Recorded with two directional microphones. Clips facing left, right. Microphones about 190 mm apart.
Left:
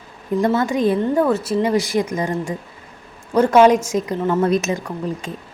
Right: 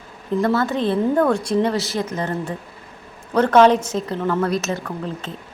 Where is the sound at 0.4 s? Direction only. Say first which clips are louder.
Left 3 dB; 15° left (ahead or behind).